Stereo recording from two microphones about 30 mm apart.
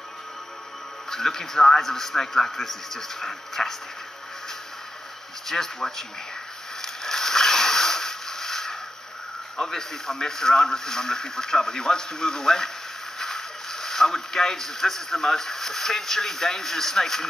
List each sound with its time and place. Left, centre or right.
1.1 s a man's voice: centre
5.5 s a man's voice: centre
6.8 s a sound: centre
9.6 s speech: centre